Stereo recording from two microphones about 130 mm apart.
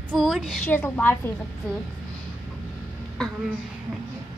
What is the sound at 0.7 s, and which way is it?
Speech, 15° left (ahead or behind).